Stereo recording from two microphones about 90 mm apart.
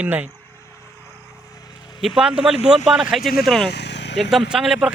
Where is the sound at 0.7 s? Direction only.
30° left (ahead or behind); by 2.0 s 55° left (ahead or behind).